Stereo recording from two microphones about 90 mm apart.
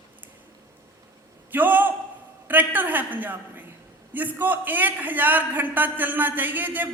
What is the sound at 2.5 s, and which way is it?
A woman's voice, 20° right (ahead or behind).